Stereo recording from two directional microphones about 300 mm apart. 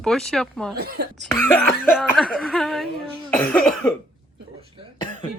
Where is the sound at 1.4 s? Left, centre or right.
Centre.